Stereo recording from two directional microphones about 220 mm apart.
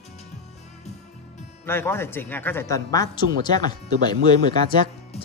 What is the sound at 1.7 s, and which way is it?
Speech, 10° left (ahead or behind).